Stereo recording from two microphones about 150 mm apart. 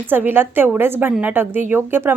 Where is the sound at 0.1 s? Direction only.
15° right (ahead or behind).